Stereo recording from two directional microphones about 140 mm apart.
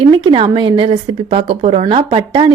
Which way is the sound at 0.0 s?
35° right (ahead or behind).